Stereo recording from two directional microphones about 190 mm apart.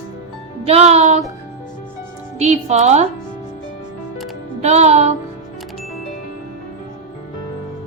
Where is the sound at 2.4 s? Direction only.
35° right (ahead or behind).